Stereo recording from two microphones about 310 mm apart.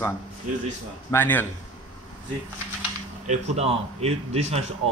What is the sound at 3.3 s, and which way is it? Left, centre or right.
Speech, right.